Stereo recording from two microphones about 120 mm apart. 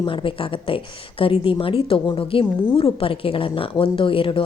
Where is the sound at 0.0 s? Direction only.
45° left (ahead or behind).